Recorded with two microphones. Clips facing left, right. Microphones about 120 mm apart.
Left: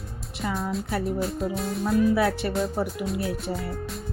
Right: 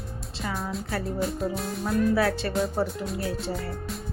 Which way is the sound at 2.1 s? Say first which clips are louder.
Left 1 dB; 20° left (ahead or behind).